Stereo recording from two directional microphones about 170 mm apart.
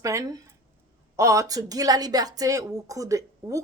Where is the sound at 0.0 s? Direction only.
20° right (ahead or behind).